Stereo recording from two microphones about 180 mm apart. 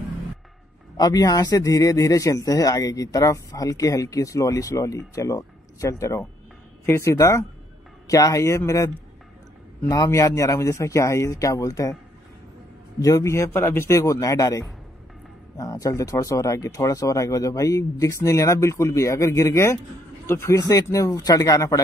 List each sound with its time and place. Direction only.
0.9 s a man's voice: 20° left (ahead or behind)
13.0 s a man's voice: 15° left (ahead or behind)